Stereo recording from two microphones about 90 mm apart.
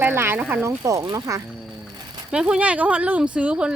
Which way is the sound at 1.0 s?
50° right (ahead or behind).